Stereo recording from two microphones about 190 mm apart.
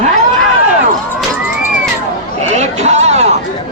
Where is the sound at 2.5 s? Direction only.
35° right (ahead or behind).